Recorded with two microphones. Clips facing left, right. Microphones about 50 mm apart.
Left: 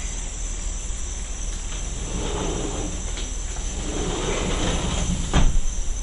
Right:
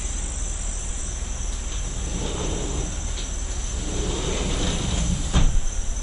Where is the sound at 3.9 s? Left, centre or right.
Left.